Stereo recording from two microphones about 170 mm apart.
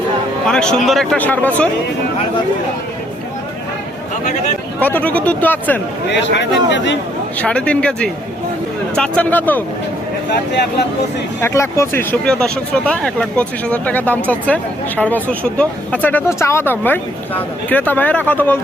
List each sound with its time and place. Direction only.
0.4 s speech: 5° left (ahead or behind)
4.8 s speech: 10° left (ahead or behind)
6.1 s speech: 90° left
7.3 s speech: 5° left (ahead or behind)
11.3 s speech: 15° left (ahead or behind)